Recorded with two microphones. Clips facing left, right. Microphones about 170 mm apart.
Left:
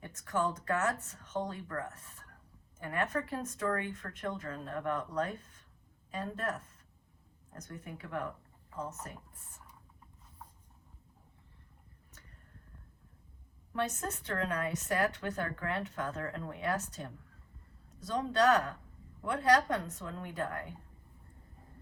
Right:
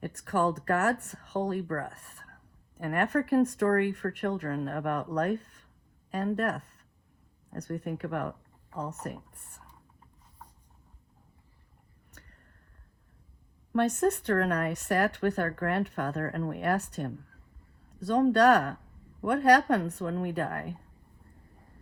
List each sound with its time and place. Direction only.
0.0 s speech: 65° right (ahead or behind)
13.7 s speech: 65° right (ahead or behind)